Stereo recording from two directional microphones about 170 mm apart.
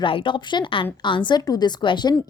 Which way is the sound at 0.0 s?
30° left (ahead or behind).